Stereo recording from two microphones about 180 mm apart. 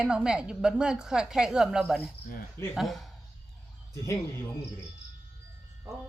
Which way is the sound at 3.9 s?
15° left (ahead or behind).